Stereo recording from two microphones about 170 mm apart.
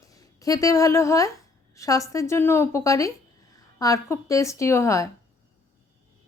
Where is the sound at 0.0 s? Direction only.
20° left (ahead or behind).